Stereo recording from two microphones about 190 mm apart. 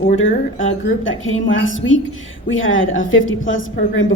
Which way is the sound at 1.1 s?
90° left.